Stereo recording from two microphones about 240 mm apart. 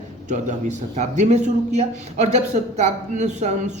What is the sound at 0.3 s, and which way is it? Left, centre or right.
A woman's voice, right.